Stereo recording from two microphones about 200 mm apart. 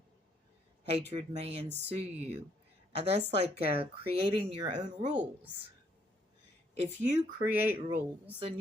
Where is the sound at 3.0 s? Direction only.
35° right (ahead or behind).